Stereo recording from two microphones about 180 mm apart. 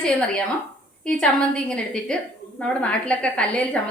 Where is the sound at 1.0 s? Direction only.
5° left (ahead or behind).